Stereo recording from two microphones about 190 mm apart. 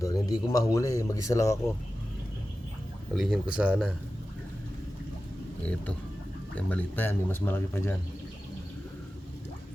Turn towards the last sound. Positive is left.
turn(degrees=10)  # may be behind; listen again after turning